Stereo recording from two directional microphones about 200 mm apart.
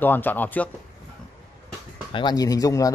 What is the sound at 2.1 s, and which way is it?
Speech, 25° left (ahead or behind).